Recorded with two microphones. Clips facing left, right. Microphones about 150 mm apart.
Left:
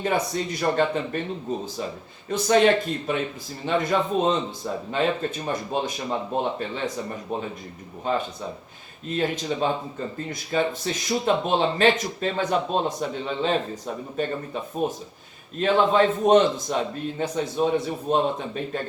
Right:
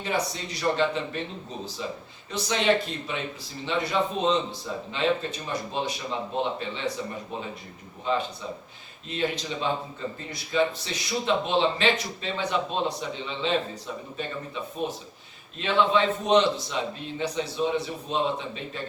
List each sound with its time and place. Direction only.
0.0 s speech: 50° left (ahead or behind)
8.1 s speech: 45° left (ahead or behind)